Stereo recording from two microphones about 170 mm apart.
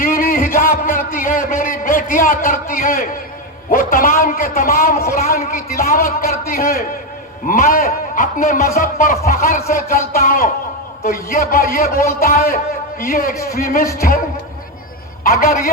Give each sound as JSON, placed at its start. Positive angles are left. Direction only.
{"t": 0.0, "sound": "a sound", "side_deg": 55}
{"t": 3.7, "sound": "a man's voice", "side_deg": 55}
{"t": 15.2, "sound": "a man's voice", "side_deg": 60}